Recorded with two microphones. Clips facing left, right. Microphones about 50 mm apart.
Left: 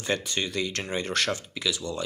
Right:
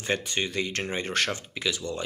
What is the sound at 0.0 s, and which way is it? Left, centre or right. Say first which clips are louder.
Speech: even; right.